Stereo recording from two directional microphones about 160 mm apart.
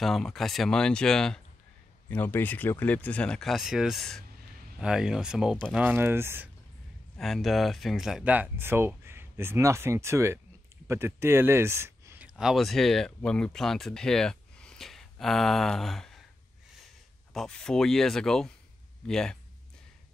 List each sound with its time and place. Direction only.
0.0 s speech: centre (ahead or behind); by 6.5 s 15° right (ahead or behind)
7.2 s speech: centre (ahead or behind); by 12.3 s 15° right (ahead or behind)
12.4 s speech: centre (ahead or behind)
17.3 s speech: 5° left (ahead or behind)